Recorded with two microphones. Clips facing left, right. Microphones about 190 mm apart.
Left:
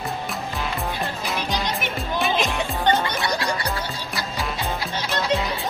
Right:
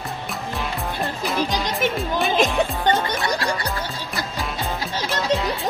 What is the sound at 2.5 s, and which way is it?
Music, centre (ahead or behind).